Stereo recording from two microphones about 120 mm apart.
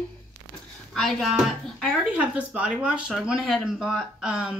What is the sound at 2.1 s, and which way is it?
Speech, 10° right (ahead or behind).